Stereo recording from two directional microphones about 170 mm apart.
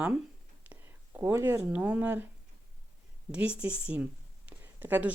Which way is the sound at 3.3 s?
5° right (ahead or behind).